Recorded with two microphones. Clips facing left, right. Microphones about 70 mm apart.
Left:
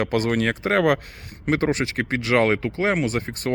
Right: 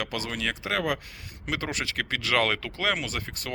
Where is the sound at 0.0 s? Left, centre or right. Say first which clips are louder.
Left 10 dB; left.